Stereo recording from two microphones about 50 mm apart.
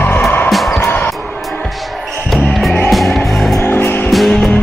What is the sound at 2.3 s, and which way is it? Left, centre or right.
Music, centre.